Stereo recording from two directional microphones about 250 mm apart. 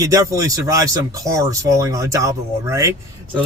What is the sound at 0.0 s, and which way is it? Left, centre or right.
Speech, centre.